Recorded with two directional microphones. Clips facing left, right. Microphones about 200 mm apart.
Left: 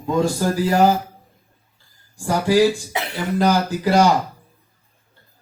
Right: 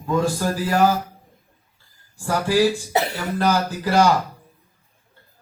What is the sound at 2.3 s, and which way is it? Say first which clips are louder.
Speech: left 3 dB; 15° left (ahead or behind).